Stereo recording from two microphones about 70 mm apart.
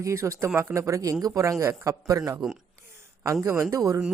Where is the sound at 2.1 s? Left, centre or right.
Right.